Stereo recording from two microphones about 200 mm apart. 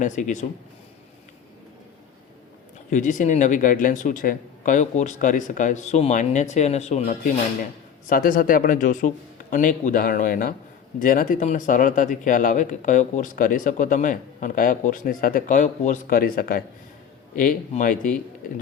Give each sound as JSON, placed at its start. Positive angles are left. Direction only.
{"t": 0.0, "sound": "speech", "side_deg": 40}
{"t": 2.9, "sound": "a man's voice", "side_deg": 40}